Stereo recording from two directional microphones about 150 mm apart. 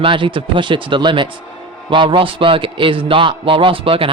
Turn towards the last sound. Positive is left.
turn(degrees=-35)  # may be behind; listen again after turning